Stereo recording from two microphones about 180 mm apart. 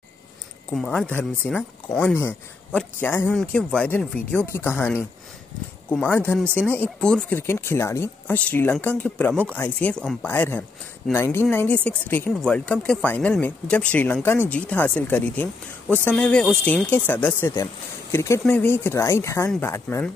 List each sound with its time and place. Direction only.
0.7 s speech: 5° left (ahead or behind)